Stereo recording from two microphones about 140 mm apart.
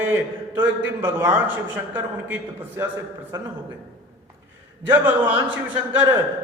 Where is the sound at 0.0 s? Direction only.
15° right (ahead or behind).